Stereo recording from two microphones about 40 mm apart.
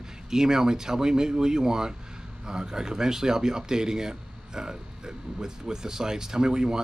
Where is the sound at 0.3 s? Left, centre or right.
Centre.